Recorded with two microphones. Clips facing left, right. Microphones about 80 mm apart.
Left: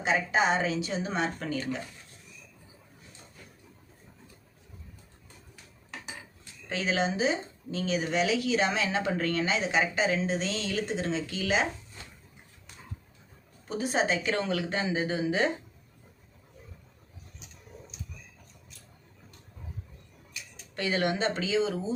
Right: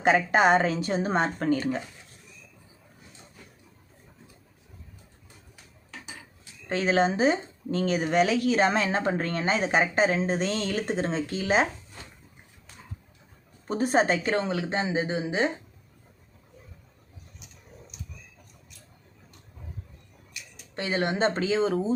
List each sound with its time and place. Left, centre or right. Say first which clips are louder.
0.0 s speech: right 5 dB; right
6.7 s speech: right 5 dB; right
13.7 s speech: right 5 dB; right
14.3 s speech: right 3 dB; right
20.7 s speech: right 1 dB; right